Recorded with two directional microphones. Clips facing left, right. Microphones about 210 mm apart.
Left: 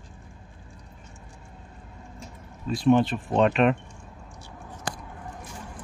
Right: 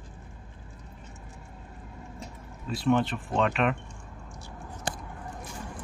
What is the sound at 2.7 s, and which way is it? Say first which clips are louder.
Speech: left 5 dB; 20° left (ahead or behind).